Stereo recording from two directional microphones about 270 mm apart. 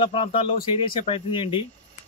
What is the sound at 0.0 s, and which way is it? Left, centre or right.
A man's voice, centre.